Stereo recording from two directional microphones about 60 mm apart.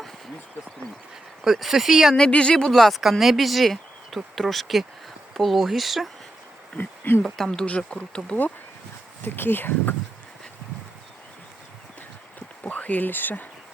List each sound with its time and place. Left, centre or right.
1.5 s speech: centre
2.1 s speech: centre
6.7 s speech: left
7.3 s speech: centre
9.2 s speech: left
12.6 s speech: left